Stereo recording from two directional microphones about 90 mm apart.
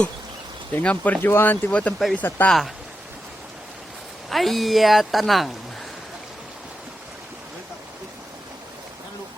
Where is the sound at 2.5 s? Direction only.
Centre (ahead or behind).